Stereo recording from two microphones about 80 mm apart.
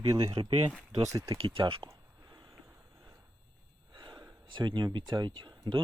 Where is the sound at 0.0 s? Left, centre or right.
Right.